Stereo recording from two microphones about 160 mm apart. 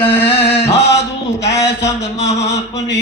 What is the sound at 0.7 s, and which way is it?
Speech, 90° left.